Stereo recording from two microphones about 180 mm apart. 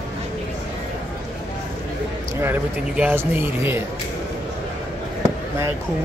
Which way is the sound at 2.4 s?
10° right (ahead or behind).